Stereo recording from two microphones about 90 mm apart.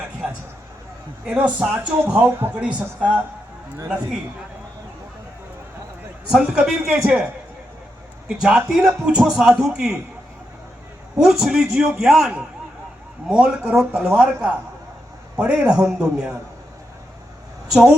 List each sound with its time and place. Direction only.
1.2 s speech: 10° right (ahead or behind)
6.3 s speech: 10° right (ahead or behind)
8.3 s speech: 10° right (ahead or behind)
11.2 s a man's voice: 5° right (ahead or behind)
17.7 s a woman's voice: 5° right (ahead or behind)